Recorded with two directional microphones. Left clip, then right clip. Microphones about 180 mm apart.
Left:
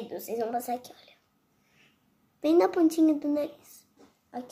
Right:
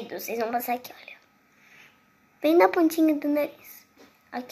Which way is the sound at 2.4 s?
30° left (ahead or behind).